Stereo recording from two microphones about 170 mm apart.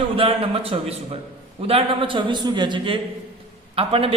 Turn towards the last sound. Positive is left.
turn(degrees=-35)  # may be behind; listen again after turning